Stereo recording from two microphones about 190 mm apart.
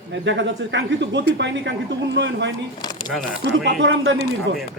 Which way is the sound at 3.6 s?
70° right (ahead or behind).